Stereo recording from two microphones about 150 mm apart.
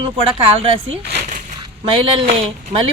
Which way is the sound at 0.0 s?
35° right (ahead or behind).